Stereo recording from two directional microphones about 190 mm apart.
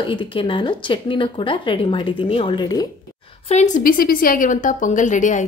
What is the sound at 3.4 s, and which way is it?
A woman's voice, 40° left (ahead or behind).